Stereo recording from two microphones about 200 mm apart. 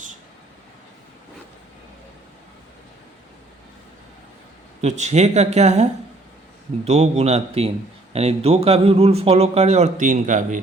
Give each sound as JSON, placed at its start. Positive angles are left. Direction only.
{"t": 4.8, "sound": "a man's voice", "side_deg": -35}